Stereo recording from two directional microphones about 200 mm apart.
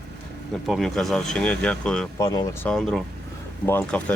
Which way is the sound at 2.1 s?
20° left (ahead or behind).